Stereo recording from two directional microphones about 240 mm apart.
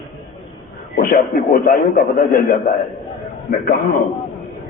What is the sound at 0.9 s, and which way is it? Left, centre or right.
A man's voice, left.